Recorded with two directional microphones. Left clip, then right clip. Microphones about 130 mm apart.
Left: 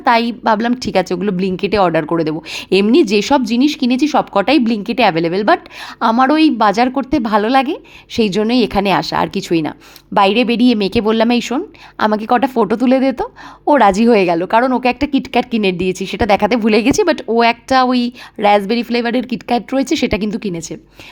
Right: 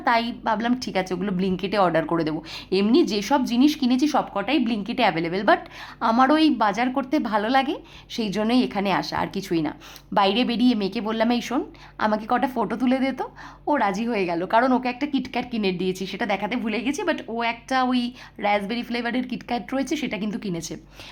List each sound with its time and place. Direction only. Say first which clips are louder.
0.0 s a woman's voice: left 9 dB; 40° left (ahead or behind)
2.5 s a woman's voice: left 10 dB; 55° left (ahead or behind)
2.9 s a woman's voice: left 7 dB; 45° left (ahead or behind)
4.4 s a woman's voice: left 11 dB; 50° left (ahead or behind); by 6.5 s 30° left (ahead or behind)
6.6 s a woman's voice: left 9 dB; 50° left (ahead or behind)
6.9 s a woman's voice: left 8 dB; 35° left (ahead or behind)
13.7 s a woman's voice: left 13 dB; 60° left (ahead or behind)
14.4 s a woman's voice: left 7 dB; 35° left (ahead or behind)
14.8 s a woman's voice: left 11 dB; 50° left (ahead or behind)
20.3 s a woman's voice: left 8 dB; 35° left (ahead or behind)